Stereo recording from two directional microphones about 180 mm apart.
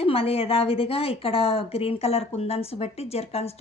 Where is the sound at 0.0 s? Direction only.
35° left (ahead or behind).